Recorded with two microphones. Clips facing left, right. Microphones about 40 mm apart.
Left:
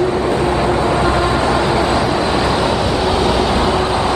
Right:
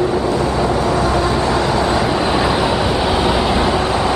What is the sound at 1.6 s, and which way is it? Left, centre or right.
Vehicle, centre.